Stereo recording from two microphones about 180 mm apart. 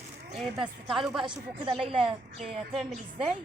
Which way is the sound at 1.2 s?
30° right (ahead or behind).